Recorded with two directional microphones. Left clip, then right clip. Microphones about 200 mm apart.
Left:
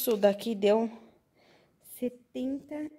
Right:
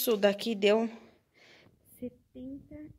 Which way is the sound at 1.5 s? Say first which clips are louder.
Right 1 dB; 5° left (ahead or behind).